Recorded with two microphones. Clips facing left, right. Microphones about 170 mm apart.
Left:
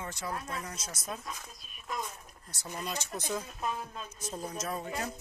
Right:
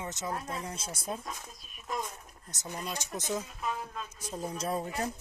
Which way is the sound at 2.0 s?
15° right (ahead or behind).